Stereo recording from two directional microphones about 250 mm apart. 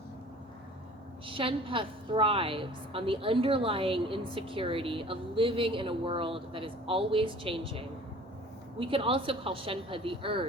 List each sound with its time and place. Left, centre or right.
1.3 s a woman's voice: right